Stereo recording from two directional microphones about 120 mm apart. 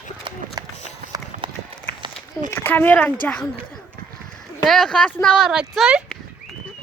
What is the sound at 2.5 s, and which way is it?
Speech, 15° left (ahead or behind).